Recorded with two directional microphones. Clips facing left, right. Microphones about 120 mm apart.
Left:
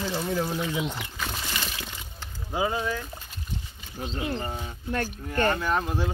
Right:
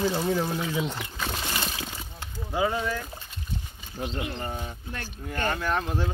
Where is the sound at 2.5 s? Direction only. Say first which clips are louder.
Right 1 dB; 10° left (ahead or behind).